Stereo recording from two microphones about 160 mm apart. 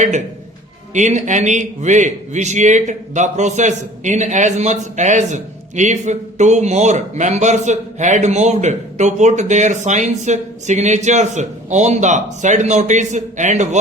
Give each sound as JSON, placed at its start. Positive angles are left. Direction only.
{"t": 0.9, "sound": "a man's voice", "side_deg": -50}